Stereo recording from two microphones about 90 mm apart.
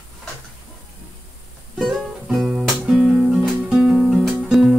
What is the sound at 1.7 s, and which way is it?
Music, centre (ahead or behind).